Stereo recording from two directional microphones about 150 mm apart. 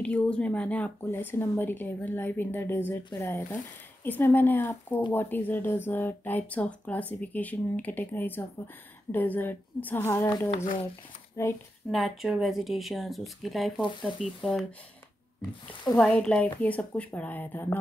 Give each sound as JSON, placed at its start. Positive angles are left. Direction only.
{"t": 0.0, "sound": "speech", "side_deg": 5}
{"t": 11.9, "sound": "speech", "side_deg": 0}
{"t": 15.9, "sound": "speech", "side_deg": 5}